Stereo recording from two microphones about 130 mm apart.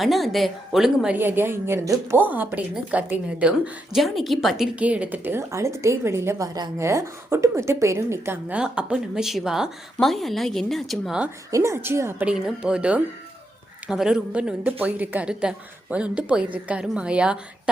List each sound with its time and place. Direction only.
0.0 s a woman's voice: centre (ahead or behind)
1.1 s a woman's voice: 15° right (ahead or behind); by 11.2 s centre (ahead or behind)
11.5 s a woman's voice: 25° right (ahead or behind)
12.3 s a woman's voice: 5° right (ahead or behind)